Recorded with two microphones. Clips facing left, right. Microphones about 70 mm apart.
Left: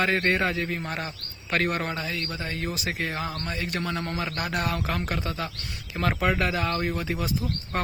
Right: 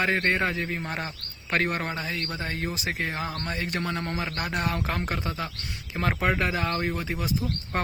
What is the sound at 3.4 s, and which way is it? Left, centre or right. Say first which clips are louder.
Speech: even; right.